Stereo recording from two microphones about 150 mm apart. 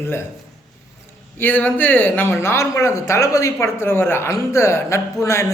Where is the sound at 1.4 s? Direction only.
10° left (ahead or behind).